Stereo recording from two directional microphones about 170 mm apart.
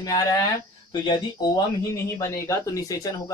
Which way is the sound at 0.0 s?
20° left (ahead or behind).